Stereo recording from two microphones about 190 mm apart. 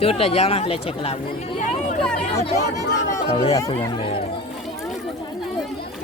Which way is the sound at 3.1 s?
25° left (ahead or behind).